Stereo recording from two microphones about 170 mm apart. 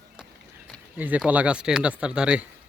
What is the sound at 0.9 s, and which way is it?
Speech, 10° right (ahead or behind).